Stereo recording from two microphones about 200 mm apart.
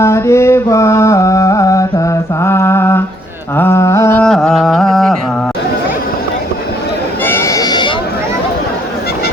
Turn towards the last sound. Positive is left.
turn(degrees=20)  # may be behind; listen again after turning